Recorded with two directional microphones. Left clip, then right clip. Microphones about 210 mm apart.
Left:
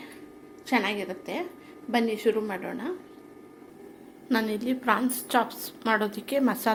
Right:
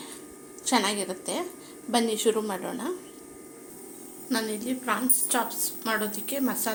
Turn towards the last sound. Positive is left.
turn(degrees=25)  # may be behind; listen again after turning